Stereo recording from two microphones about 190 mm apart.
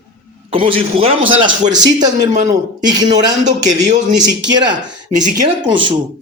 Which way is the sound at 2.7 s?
20° right (ahead or behind).